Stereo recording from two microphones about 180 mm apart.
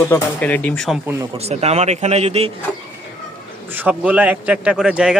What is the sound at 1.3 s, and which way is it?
A man's voice, 35° right (ahead or behind).